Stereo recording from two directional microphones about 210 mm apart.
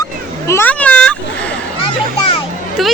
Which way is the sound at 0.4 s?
10° left (ahead or behind).